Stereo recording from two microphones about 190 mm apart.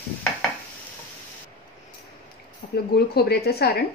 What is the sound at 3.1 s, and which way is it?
Speech, 55° left (ahead or behind).